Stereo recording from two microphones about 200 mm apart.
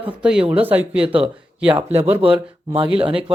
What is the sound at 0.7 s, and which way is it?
Speech, 5° right (ahead or behind).